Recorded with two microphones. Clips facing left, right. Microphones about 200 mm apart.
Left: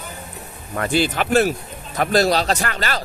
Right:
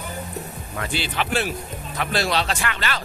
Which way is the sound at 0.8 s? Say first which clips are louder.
Left 7 dB; 45° left (ahead or behind).